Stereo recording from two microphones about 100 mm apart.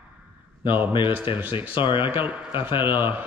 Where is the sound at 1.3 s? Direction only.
55° left (ahead or behind).